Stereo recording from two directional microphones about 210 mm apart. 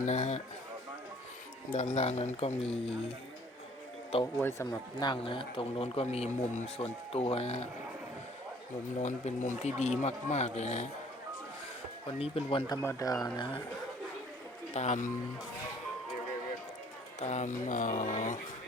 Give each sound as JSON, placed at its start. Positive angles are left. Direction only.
{"t": 0.0, "sound": "speech", "side_deg": 35}
{"t": 1.7, "sound": "speech", "side_deg": 35}
{"t": 4.4, "sound": "speech", "side_deg": 10}
{"t": 9.0, "sound": "speech", "side_deg": 35}
{"t": 12.2, "sound": "speech", "side_deg": 25}
{"t": 14.7, "sound": "speech", "side_deg": 35}
{"t": 17.2, "sound": "speech", "side_deg": 30}